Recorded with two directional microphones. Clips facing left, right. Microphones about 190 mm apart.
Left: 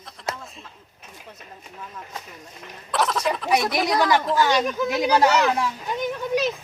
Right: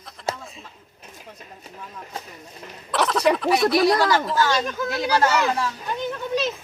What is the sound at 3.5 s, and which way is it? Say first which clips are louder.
Speech: right 1 dB; 20° left (ahead or behind).